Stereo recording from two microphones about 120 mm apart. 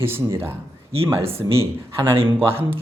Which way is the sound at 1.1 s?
50° right (ahead or behind).